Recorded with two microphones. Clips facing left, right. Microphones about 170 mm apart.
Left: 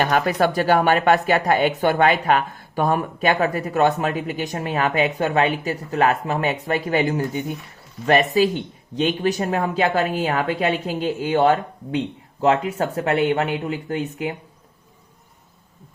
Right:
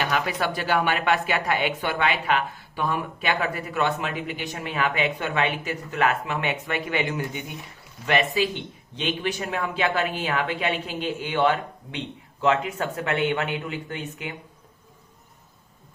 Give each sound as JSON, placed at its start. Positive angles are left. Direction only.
{"t": 0.0, "sound": "speech", "side_deg": 45}